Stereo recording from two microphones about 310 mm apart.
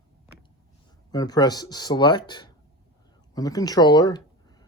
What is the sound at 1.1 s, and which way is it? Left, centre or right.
Speech, centre.